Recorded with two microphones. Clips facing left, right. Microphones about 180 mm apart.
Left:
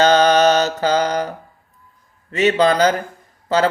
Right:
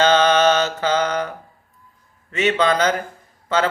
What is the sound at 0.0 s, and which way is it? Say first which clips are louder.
Mantra: left 2 dB; 40° left (ahead or behind).